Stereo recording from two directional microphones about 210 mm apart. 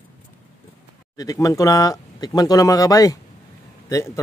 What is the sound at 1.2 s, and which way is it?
Speech, 15° left (ahead or behind).